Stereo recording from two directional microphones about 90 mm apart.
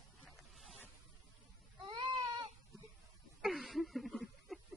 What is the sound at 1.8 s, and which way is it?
Baby cry, 60° right (ahead or behind).